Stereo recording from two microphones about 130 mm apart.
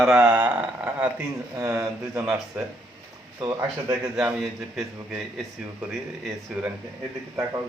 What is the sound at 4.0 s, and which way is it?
A man's voice, 5° right (ahead or behind).